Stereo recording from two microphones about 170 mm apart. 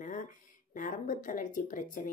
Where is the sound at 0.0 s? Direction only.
50° left (ahead or behind).